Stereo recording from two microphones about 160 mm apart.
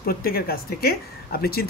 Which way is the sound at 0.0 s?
70° left (ahead or behind).